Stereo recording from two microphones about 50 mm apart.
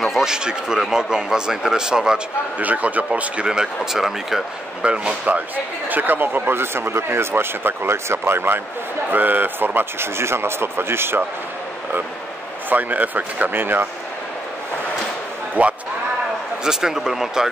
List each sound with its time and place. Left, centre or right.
0.0 s a man's voice: centre
2.6 s speech: right
3.4 s a man's voice: centre
4.8 s speech: right
5.9 s speech: right
9.1 s speech: right
12.6 s speech: right
15.6 s speech: right
16.6 s a man's voice: centre